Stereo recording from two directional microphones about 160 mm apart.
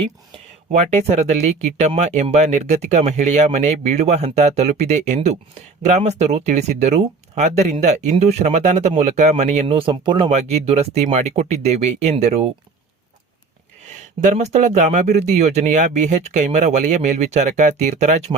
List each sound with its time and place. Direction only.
0.3 s speech: 45° right (ahead or behind)
10.2 s speech: 45° right (ahead or behind)
14.2 s speech: 50° right (ahead or behind)